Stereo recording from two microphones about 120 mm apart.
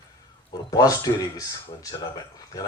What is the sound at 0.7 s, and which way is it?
Speech, 30° left (ahead or behind).